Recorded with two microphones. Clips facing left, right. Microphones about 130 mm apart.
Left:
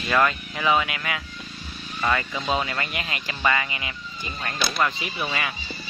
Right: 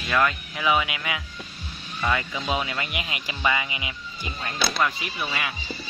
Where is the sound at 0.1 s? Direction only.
Centre (ahead or behind).